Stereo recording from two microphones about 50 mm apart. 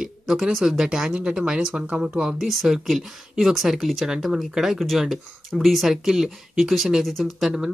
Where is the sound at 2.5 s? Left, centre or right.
Centre.